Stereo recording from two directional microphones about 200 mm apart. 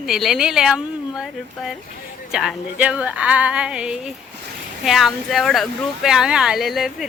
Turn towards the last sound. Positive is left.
turn(degrees=0)  # may be behind; listen again after turning